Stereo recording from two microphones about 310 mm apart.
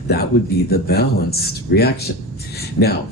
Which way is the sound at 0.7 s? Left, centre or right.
Left.